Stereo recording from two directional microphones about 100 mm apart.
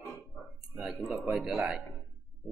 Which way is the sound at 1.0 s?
Centre (ahead or behind).